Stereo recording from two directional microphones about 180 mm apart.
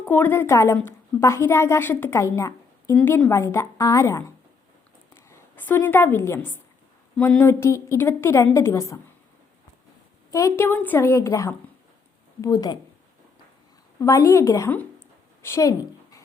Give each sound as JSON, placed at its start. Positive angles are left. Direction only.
{"t": 0.0, "sound": "a woman's voice", "side_deg": 10}
{"t": 10.3, "sound": "a woman's voice", "side_deg": 15}
{"t": 14.0, "sound": "a woman's voice", "side_deg": 15}
{"t": 15.4, "sound": "a sound", "side_deg": 15}